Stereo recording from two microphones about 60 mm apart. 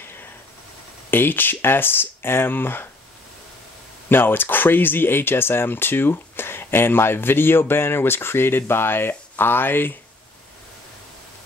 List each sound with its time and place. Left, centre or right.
1.1 s speech: left
4.1 s speech: left